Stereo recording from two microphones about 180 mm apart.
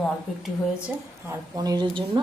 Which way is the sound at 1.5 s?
20° right (ahead or behind).